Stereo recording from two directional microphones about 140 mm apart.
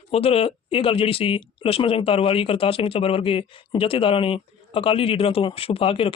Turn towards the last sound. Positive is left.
turn(degrees=40)  # may be behind; listen again after turning